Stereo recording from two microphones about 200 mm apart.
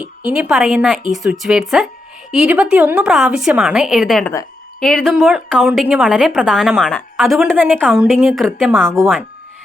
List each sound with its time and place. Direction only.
0.3 s a woman's voice: 5° right (ahead or behind)